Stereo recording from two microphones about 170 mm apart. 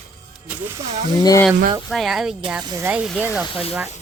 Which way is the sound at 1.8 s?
Centre (ahead or behind).